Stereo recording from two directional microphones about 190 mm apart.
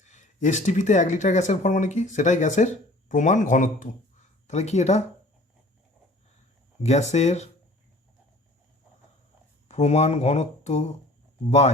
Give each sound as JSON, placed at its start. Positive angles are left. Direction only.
{"t": 0.0, "sound": "speech", "side_deg": 40}
{"t": 6.8, "sound": "speech", "side_deg": 35}
{"t": 9.6, "sound": "speech", "side_deg": 35}